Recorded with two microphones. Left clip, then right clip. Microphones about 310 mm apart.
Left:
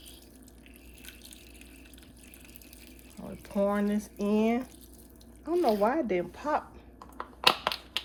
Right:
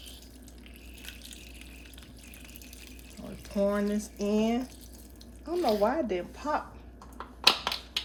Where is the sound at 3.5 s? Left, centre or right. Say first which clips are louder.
Even; left.